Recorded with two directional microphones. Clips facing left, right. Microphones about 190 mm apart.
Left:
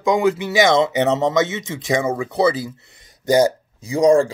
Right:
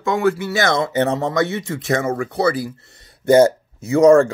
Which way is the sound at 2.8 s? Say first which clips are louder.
Right 2 dB; 20° left (ahead or behind).